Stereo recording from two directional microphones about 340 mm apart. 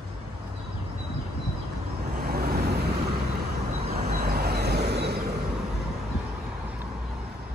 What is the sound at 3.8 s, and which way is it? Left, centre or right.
Vehicle, right.